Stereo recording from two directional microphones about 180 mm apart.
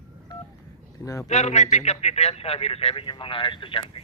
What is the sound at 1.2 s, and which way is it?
Speech, 40° left (ahead or behind).